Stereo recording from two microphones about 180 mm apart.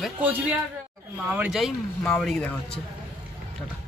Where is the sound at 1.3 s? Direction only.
5° right (ahead or behind).